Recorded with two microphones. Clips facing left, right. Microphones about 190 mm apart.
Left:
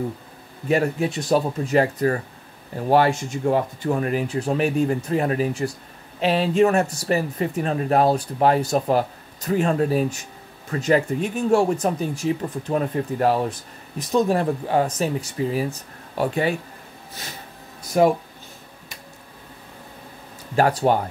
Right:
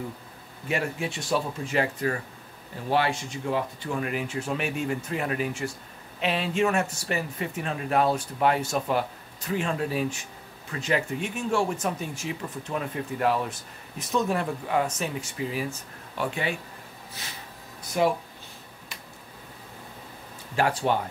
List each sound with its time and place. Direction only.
0.7 s speech: 40° left (ahead or behind)
17.9 s speech: 45° left (ahead or behind)
20.5 s speech: 40° left (ahead or behind)